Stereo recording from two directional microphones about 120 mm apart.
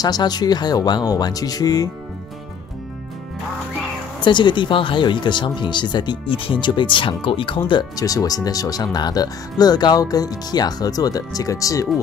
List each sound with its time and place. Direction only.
0.0 s speech: 35° left (ahead or behind)
4.2 s speech: 40° left (ahead or behind)
8.0 s speech: 30° left (ahead or behind)